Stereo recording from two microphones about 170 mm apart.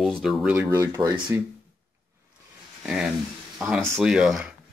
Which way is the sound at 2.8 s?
5° right (ahead or behind).